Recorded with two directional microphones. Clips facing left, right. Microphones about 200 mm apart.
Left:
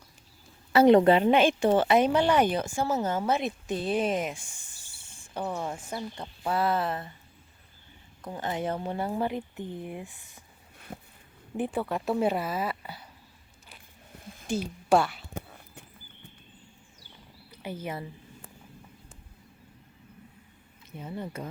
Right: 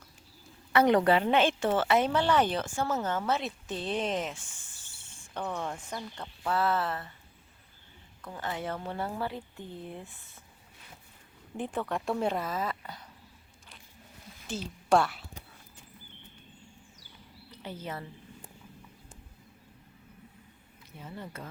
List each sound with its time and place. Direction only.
0.7 s a woman's voice: 25° left (ahead or behind)
8.2 s a woman's voice: 20° left (ahead or behind)
10.9 s speech: 55° left (ahead or behind)
11.5 s a woman's voice: 10° left (ahead or behind)
14.4 s a woman's voice: 10° left (ahead or behind)
15.3 s a sound: 50° left (ahead or behind)
17.5 s speech: 10° left (ahead or behind)
21.0 s a woman's voice: 15° left (ahead or behind)